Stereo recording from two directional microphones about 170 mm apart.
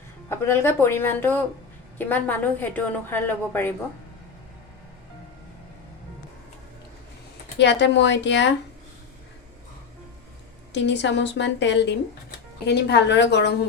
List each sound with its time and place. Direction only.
0.3 s a woman's voice: 15° left (ahead or behind)
7.6 s a woman's voice: 90° left
10.7 s a woman's voice: 90° left